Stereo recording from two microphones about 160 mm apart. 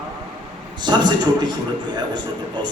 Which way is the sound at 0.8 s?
30° right (ahead or behind).